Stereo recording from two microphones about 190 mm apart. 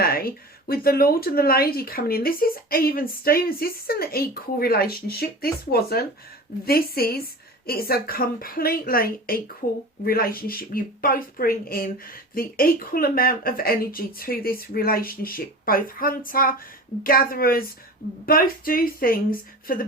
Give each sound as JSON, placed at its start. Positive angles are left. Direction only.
{"t": 0.0, "sound": "speech", "side_deg": 50}